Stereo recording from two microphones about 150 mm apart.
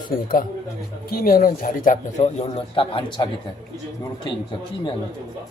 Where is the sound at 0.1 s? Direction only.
75° left (ahead or behind); by 3.2 s 35° left (ahead or behind).